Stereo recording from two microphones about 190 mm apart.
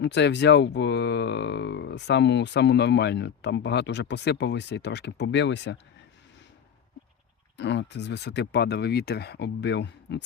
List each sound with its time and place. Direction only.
0.0 s speech: 65° left (ahead or behind)
7.5 s speech: 70° left (ahead or behind)